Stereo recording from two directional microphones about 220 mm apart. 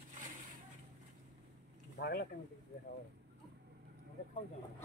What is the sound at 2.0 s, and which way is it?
Speech, 45° left (ahead or behind).